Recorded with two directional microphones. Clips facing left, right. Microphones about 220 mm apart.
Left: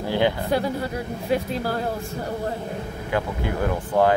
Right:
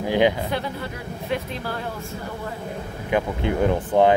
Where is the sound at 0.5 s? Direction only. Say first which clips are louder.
Left 5 dB; 40° left (ahead or behind).